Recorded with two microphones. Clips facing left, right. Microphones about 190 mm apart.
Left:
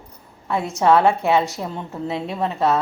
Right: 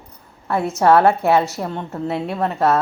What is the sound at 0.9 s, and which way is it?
Speech, 60° right (ahead or behind).